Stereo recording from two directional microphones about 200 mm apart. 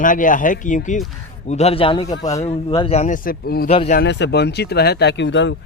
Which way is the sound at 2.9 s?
35° left (ahead or behind).